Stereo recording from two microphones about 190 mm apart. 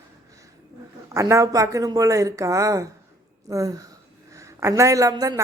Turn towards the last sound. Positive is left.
turn(degrees=-20)  # may be behind; listen again after turning